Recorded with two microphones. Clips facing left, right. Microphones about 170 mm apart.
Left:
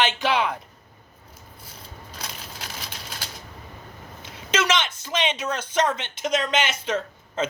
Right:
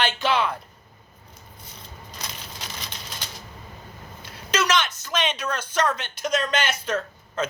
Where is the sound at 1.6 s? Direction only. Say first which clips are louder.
Even; 5° left (ahead or behind).